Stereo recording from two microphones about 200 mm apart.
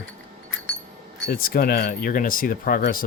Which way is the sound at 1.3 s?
45° left (ahead or behind).